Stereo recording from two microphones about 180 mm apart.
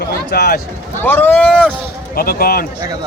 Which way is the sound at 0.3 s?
65° left (ahead or behind).